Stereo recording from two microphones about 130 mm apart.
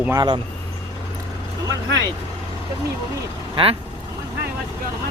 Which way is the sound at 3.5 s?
45° right (ahead or behind).